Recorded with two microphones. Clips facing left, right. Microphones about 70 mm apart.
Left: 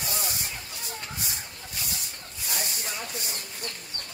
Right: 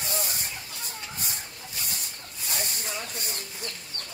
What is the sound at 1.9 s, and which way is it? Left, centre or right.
Spray, right.